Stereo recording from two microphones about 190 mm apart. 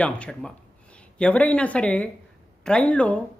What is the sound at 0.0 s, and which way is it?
Speech, 5° left (ahead or behind).